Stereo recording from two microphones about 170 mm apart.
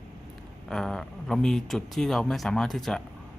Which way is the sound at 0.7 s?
Centre (ahead or behind).